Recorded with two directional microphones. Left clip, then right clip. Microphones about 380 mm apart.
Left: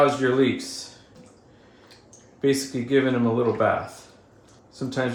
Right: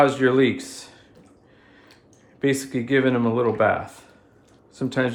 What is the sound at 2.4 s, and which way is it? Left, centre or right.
Speech, right.